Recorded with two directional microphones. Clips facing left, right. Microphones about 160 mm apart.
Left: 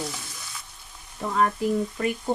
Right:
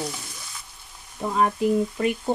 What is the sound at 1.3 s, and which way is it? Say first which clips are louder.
Speech: right 2 dB; 15° right (ahead or behind).